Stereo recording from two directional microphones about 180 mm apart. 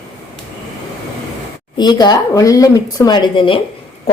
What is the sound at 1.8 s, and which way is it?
A man's voice, 25° left (ahead or behind).